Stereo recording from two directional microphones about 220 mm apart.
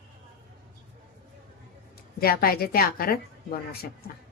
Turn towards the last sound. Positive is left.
turn(degrees=40)  # may be behind; listen again after turning